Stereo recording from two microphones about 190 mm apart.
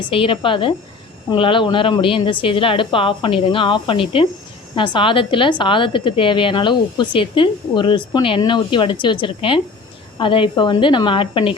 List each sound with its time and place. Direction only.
0.0 s a woman's voice: 30° left (ahead or behind)